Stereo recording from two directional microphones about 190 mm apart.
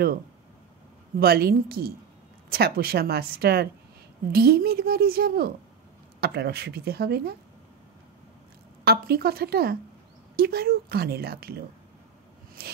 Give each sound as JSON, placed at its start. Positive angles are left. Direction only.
{"t": 1.2, "sound": "a woman's voice", "side_deg": -55}
{"t": 8.8, "sound": "a woman's voice", "side_deg": -55}
{"t": 12.6, "sound": "a sound", "side_deg": -55}